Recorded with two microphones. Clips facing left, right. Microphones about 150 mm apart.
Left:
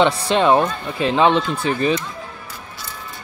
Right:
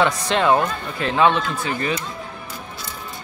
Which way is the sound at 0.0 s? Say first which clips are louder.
Left 3 dB; 20° left (ahead or behind).